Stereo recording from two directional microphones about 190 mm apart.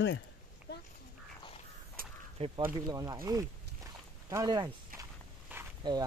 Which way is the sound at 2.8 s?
20° right (ahead or behind).